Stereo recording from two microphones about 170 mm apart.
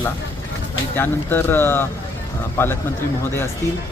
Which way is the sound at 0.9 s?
10° left (ahead or behind).